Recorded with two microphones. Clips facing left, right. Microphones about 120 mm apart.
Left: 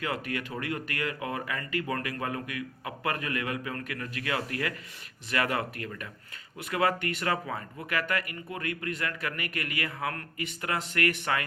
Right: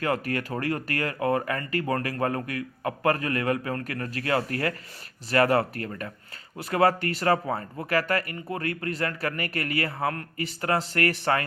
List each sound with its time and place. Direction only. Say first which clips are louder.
0.0 s speech: right 6 dB; 45° right (ahead or behind)